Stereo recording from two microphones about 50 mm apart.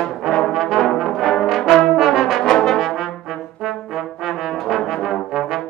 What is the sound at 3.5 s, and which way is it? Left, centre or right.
Trombone, centre.